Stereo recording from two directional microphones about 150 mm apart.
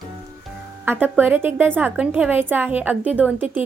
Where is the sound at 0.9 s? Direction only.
10° right (ahead or behind).